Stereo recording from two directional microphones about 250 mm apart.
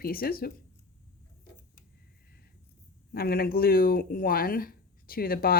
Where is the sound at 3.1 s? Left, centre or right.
Left.